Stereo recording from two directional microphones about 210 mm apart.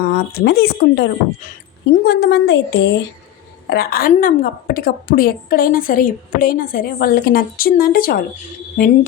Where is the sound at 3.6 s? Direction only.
45° left (ahead or behind).